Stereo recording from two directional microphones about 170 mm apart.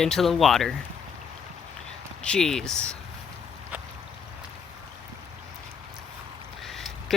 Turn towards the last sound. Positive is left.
turn(degrees=0)  # may be behind; listen again after turning